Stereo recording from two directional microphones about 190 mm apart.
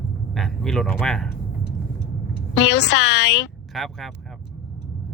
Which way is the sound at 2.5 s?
65° left (ahead or behind).